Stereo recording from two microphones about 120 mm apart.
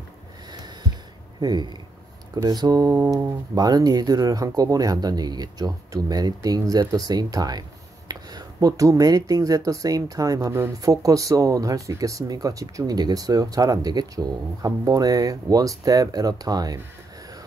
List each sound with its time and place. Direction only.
1.4 s speech: 35° right (ahead or behind)